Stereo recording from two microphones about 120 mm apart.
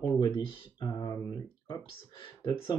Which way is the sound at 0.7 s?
30° left (ahead or behind).